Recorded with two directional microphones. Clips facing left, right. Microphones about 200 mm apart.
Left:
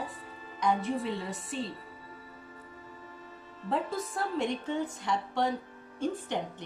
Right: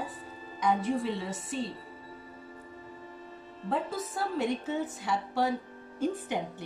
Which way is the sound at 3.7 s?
Centre (ahead or behind).